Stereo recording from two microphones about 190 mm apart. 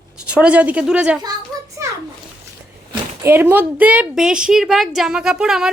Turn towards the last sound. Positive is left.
turn(degrees=-5)  # may be behind; listen again after turning